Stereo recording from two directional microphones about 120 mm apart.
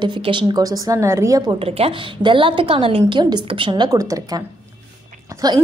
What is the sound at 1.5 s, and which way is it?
A woman's voice, 55° right (ahead or behind).